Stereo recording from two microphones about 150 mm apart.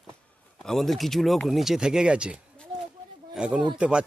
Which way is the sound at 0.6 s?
Centre (ahead or behind).